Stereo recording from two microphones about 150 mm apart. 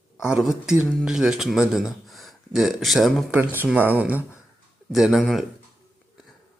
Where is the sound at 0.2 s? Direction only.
5° right (ahead or behind).